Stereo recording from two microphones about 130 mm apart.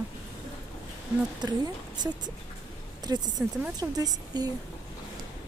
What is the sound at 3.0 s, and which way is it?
Speech, 30° right (ahead or behind).